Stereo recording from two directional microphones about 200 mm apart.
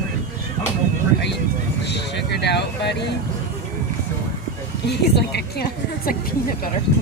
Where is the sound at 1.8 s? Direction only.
60° left (ahead or behind).